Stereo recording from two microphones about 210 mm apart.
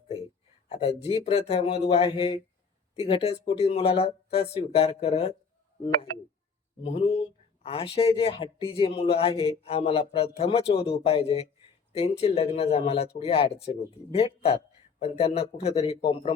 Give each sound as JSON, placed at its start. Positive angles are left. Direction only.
{"t": 0.7, "sound": "speech", "side_deg": 30}
{"t": 6.8, "sound": "speech", "side_deg": 30}